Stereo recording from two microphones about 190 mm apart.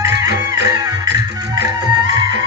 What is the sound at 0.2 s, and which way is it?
Music, 20° right (ahead or behind).